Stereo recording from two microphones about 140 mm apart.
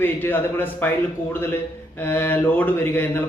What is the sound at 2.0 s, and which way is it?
Speech, 15° left (ahead or behind).